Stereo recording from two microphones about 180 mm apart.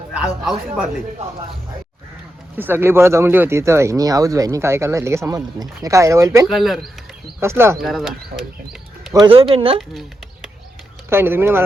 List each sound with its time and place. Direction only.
0.1 s speech: 5° right (ahead or behind)
2.6 s speech: 10° right (ahead or behind)
6.5 s speech: centre (ahead or behind)
7.3 s speech: 15° right (ahead or behind)
7.8 s speech: centre (ahead or behind)
9.2 s speech: 30° right (ahead or behind)
11.1 s speech: 15° right (ahead or behind)